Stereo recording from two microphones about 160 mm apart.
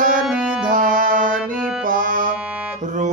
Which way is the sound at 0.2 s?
5° right (ahead or behind).